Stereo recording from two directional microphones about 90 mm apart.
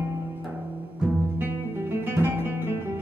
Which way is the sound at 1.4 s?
25° right (ahead or behind).